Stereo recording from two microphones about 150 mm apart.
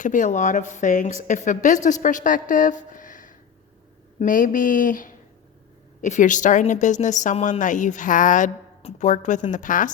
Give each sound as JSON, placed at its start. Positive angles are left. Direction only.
{"t": 0.0, "sound": "a woman's voice", "side_deg": 60}